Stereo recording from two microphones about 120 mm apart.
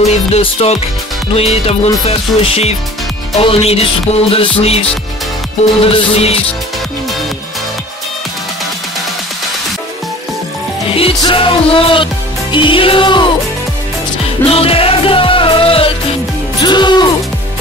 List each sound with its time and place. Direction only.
0.0 s music: 65° left (ahead or behind)
5.9 s music: 55° left (ahead or behind)
10.9 s music: 50° left (ahead or behind)
14.2 s music: 55° left (ahead or behind)
16.6 s music: 40° left (ahead or behind)